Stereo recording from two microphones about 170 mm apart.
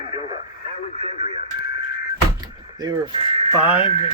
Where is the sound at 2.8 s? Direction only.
30° right (ahead or behind).